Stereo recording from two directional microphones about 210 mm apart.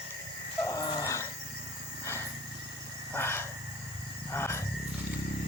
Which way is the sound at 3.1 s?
10° left (ahead or behind).